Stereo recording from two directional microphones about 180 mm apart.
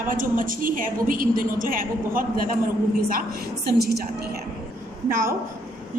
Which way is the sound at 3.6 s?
60° right (ahead or behind).